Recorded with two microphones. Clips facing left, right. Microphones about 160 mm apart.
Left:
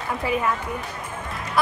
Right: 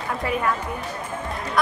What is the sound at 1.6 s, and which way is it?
Fowl, 5° left (ahead or behind).